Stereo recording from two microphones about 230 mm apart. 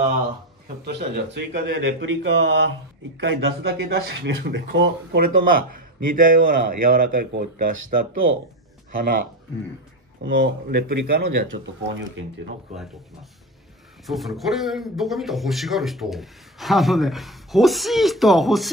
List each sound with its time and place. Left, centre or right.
0.8 s a man's voice: right
8.9 s speech: right
10.2 s a man's voice: right
14.0 s a man's voice: centre